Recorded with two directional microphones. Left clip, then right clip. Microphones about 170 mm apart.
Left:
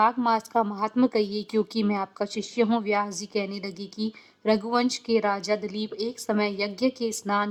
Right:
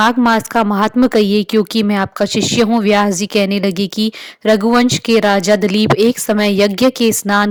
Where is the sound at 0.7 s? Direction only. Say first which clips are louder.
Right 12 dB; 45° right (ahead or behind).